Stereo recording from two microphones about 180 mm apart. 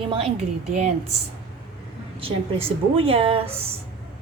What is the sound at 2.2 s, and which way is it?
A woman's voice, 30° right (ahead or behind).